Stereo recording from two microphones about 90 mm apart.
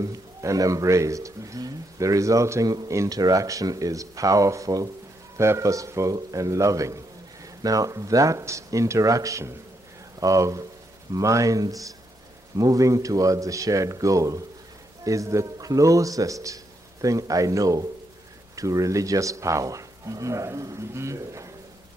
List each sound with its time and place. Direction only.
0.0 s speech: 40° right (ahead or behind)